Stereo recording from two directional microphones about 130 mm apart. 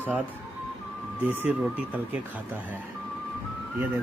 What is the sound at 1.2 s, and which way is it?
Speech, 15° right (ahead or behind).